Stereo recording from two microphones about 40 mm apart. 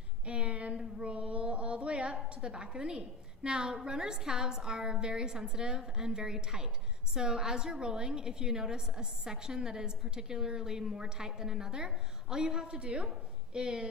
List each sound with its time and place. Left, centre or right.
0.3 s a sound: right
0.7 s female singing: right
2.2 s a woman's voice: right
12.7 s a woman's voice: right